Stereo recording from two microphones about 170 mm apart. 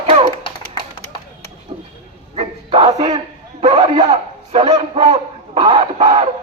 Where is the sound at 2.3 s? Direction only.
35° right (ahead or behind).